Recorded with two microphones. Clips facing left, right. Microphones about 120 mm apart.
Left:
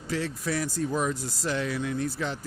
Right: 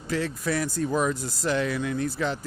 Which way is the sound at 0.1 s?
55° right (ahead or behind).